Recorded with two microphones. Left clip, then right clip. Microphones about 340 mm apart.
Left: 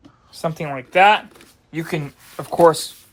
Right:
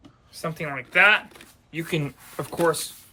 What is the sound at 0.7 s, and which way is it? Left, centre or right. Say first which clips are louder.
Speech: left 4 dB; centre.